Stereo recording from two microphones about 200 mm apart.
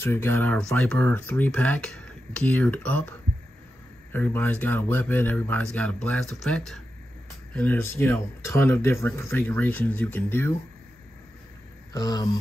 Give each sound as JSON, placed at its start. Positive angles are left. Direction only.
{"t": 0.0, "sound": "speech", "side_deg": 10}
{"t": 11.9, "sound": "speech", "side_deg": 20}